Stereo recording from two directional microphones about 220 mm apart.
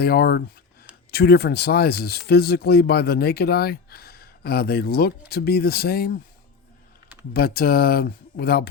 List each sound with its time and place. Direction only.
0.0 s speech: 45° left (ahead or behind)
7.3 s speech: 45° left (ahead or behind)